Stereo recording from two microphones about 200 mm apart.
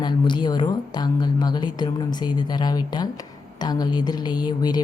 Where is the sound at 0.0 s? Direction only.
20° left (ahead or behind).